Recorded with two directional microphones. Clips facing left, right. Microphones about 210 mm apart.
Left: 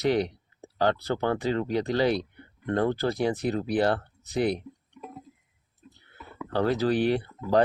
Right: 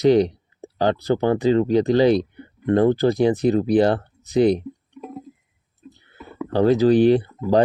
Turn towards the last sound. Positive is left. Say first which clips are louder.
# right 6 dB
turn(degrees=-25)  # may be behind; listen again after turning